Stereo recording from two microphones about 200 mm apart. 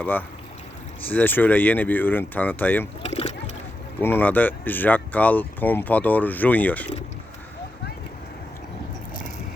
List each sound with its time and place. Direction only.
0.0 s speech: 10° left (ahead or behind)
3.0 s splash: 30° left (ahead or behind)
4.0 s speech: 10° left (ahead or behind)